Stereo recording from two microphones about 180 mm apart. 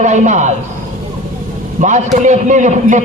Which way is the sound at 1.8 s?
40° right (ahead or behind).